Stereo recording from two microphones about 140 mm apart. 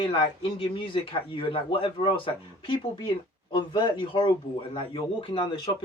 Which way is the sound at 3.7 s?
35° left (ahead or behind).